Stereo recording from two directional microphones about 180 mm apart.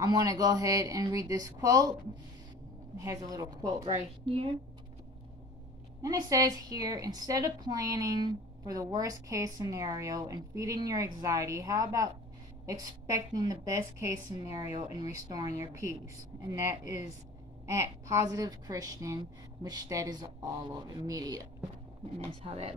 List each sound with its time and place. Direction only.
0.0 s a woman's voice: 20° right (ahead or behind)
3.0 s a woman's voice: 20° right (ahead or behind)
6.0 s a woman's voice: 20° right (ahead or behind)
22.4 s speech: 30° right (ahead or behind)